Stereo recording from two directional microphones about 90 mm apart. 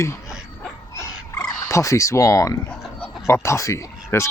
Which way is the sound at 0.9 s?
35° left (ahead or behind).